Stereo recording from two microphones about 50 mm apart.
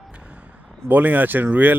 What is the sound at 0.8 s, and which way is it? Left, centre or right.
Speech, right.